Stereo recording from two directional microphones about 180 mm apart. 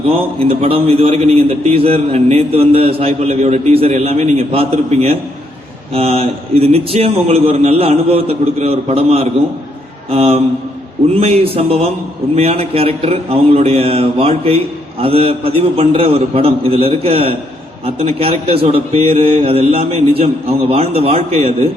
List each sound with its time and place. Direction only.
0.0 s a man's voice: 30° right (ahead or behind)